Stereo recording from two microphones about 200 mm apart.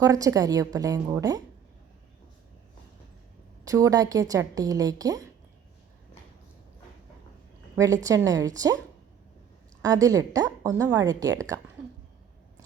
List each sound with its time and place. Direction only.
0.0 s speech: 15° right (ahead or behind)
3.6 s speech: 15° right (ahead or behind)
8.0 s speech: 15° right (ahead or behind)
9.8 s speech: 15° right (ahead or behind)